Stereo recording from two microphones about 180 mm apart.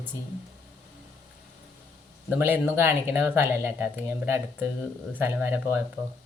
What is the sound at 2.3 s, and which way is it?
Speech, 10° right (ahead or behind).